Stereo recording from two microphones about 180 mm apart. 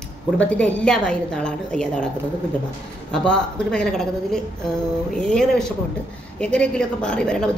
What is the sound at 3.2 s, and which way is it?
A woman's voice, 5° left (ahead or behind).